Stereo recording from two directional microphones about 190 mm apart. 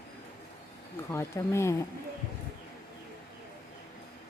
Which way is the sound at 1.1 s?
15° left (ahead or behind).